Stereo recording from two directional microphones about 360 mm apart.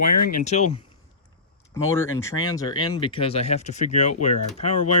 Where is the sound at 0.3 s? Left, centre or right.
Left.